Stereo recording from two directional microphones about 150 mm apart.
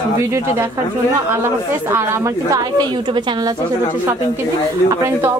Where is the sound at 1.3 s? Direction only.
15° right (ahead or behind).